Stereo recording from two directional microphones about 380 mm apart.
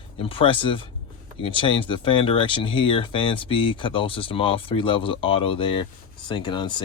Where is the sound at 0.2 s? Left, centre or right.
Centre.